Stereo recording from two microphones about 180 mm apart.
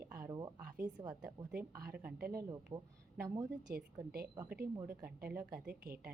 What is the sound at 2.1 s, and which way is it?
Speech, 55° right (ahead or behind).